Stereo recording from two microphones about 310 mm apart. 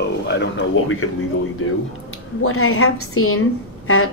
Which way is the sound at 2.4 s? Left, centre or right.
Left.